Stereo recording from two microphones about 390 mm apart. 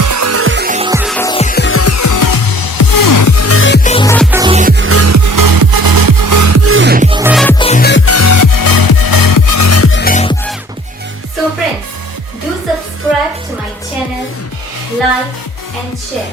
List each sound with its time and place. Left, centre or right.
0.0 s music: right; by 3.8 s left
3.8 s music: centre
4.3 s music: centre
7.2 s music: centre
7.6 s music: centre